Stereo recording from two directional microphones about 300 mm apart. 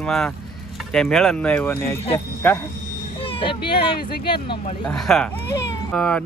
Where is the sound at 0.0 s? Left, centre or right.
Centre.